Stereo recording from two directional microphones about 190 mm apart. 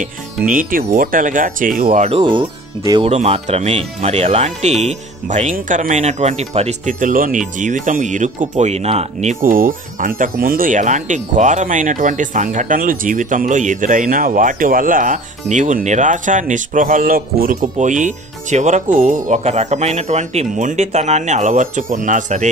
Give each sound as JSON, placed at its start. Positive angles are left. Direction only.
{"t": 0.0, "sound": "speech", "side_deg": -45}
{"t": 3.1, "sound": "speech", "side_deg": -35}